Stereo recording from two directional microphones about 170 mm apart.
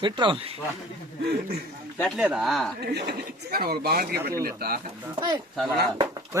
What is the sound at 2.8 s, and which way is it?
Speech, 70° right (ahead or behind).